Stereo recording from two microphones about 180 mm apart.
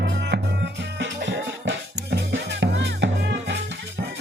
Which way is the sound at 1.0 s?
85° right.